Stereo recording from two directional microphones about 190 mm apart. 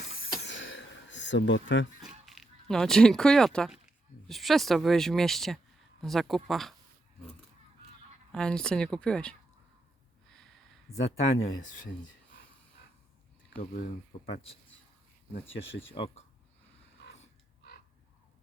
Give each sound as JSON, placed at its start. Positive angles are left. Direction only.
{"t": 0.4, "sound": "a sound", "side_deg": 80}
{"t": 2.0, "sound": "speech", "side_deg": 0}
{"t": 8.3, "sound": "speech", "side_deg": 5}
{"t": 10.9, "sound": "speech", "side_deg": 15}
{"t": 11.3, "sound": "speech", "side_deg": 45}
{"t": 13.6, "sound": "speech", "side_deg": 45}
{"t": 15.9, "sound": "speech", "side_deg": 30}